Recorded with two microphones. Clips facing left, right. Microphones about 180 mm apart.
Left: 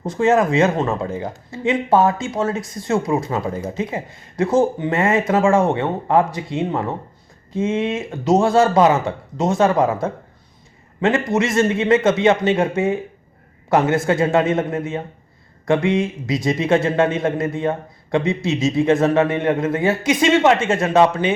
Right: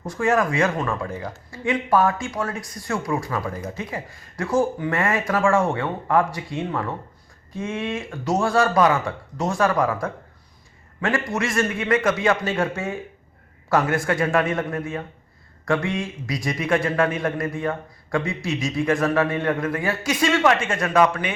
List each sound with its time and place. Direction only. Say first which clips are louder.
0.0 s speech: left 5 dB; 20° left (ahead or behind)